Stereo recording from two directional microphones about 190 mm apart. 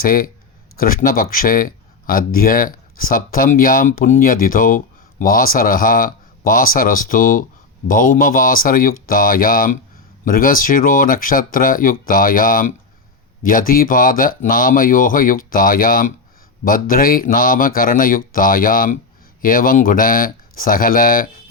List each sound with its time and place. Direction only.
0.0 s speech: 50° left (ahead or behind)